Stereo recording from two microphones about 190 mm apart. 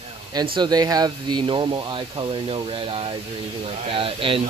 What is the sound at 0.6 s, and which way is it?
Speech, 20° right (ahead or behind).